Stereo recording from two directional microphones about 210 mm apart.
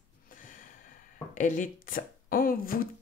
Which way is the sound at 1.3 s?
40° left (ahead or behind).